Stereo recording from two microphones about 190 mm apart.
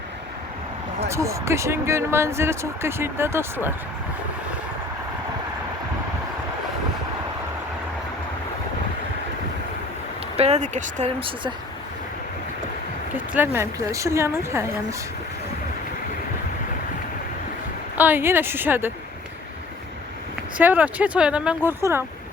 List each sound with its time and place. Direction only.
1.0 s speech: 15° right (ahead or behind)
10.3 s speech: 35° right (ahead or behind)
13.3 s speech: 10° right (ahead or behind)
17.9 s speech: 10° right (ahead or behind)
20.6 s speech: 10° right (ahead or behind)